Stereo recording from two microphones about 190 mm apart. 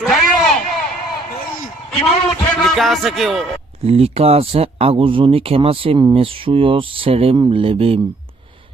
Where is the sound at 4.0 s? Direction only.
30° right (ahead or behind).